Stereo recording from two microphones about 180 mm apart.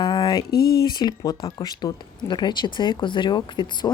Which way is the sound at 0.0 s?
25° left (ahead or behind).